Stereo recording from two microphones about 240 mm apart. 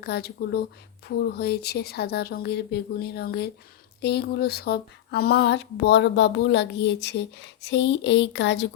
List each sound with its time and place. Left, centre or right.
0.0 s speech: left